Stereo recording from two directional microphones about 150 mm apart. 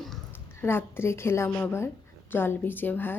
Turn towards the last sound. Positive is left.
turn(degrees=15)  # may be behind; listen again after turning